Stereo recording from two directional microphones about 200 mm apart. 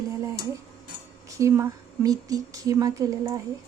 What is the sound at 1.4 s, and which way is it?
Speech, 15° right (ahead or behind).